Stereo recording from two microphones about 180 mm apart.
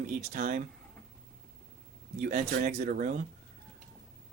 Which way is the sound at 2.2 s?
45° right (ahead or behind).